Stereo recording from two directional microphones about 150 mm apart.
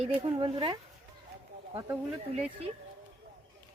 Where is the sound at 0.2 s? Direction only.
30° right (ahead or behind).